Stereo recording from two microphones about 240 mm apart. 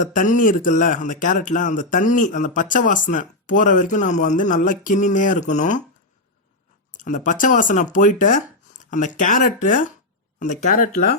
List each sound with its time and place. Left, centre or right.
0.0 s speech: left
6.9 s speech: left